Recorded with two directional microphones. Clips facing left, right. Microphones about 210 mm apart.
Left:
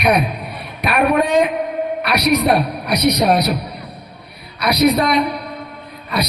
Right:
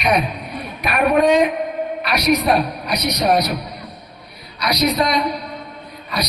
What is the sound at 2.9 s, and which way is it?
Speech, 60° left (ahead or behind).